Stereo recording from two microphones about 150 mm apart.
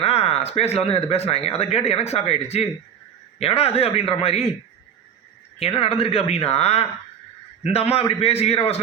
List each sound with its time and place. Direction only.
0.0 s speech: 40° left (ahead or behind)
5.5 s speech: 40° left (ahead or behind)